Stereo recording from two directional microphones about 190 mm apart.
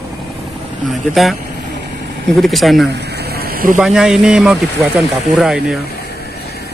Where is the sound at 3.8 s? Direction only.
5° right (ahead or behind).